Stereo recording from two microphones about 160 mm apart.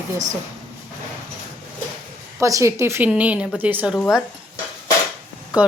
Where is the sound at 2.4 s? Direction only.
20° right (ahead or behind).